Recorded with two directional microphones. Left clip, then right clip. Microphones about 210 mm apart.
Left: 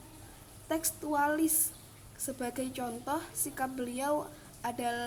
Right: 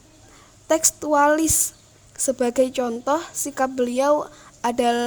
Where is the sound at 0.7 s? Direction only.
50° right (ahead or behind).